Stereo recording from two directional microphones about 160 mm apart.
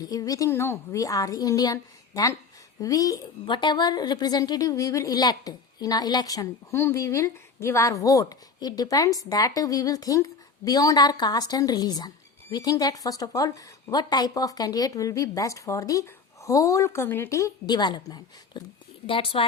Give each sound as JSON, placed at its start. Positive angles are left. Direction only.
{"t": 0.0, "sound": "a woman's voice", "side_deg": 20}
{"t": 19.0, "sound": "a woman's voice", "side_deg": 35}